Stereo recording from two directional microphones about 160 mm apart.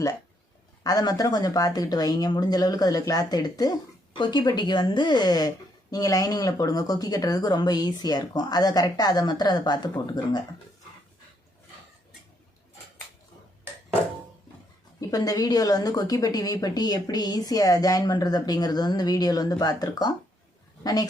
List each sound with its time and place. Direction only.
0.9 s speech: 25° left (ahead or behind)
15.1 s speech: 25° left (ahead or behind)